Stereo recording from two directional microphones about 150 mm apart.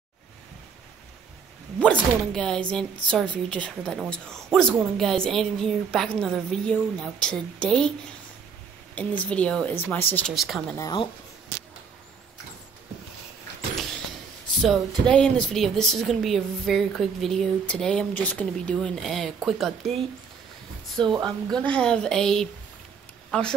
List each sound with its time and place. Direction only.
1.8 s a woman's voice: 5° left (ahead or behind)
8.9 s speech: 10° left (ahead or behind)
10.2 s a woman's voice: centre (ahead or behind)
10.8 s speech: 30° left (ahead or behind)
13.7 s a sound: 5° left (ahead or behind)
15.0 s a woman's voice: 5° left (ahead or behind)
21.0 s a woman's voice: 30° right (ahead or behind)
21.6 s a woman's voice: 5° left (ahead or behind)